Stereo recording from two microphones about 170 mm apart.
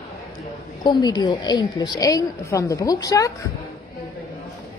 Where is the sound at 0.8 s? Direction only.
25° left (ahead or behind).